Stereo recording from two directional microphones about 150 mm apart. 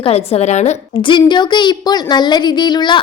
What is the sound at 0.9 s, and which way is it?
A woman's voice, 30° left (ahead or behind).